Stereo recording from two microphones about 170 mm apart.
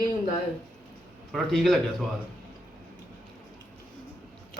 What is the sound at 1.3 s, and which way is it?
Speech, centre (ahead or behind).